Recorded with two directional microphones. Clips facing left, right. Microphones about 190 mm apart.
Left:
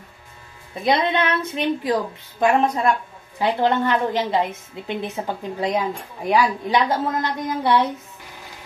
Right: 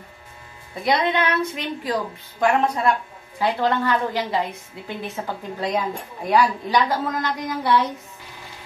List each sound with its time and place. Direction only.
0.8 s a woman's voice: 25° left (ahead or behind)